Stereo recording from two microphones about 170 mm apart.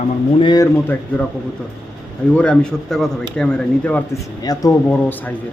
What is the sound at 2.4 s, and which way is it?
Speech, 5° left (ahead or behind).